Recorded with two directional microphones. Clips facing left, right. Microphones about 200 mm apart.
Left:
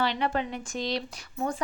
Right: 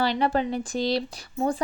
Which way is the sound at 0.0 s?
35° right (ahead or behind).